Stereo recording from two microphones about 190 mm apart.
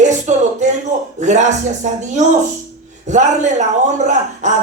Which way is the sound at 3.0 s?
40° right (ahead or behind).